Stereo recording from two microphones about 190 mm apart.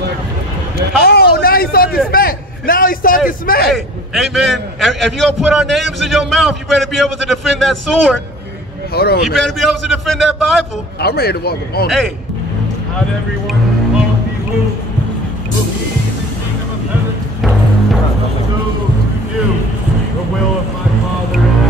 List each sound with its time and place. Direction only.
1.0 s a sound: 55° left (ahead or behind)
3.3 s a man's voice: 50° left (ahead or behind)
3.7 s a man's voice: centre (ahead or behind)
8.9 s speech: 55° left (ahead or behind)
9.2 s a man's voice: centre (ahead or behind)
11.0 s speech: 55° left (ahead or behind)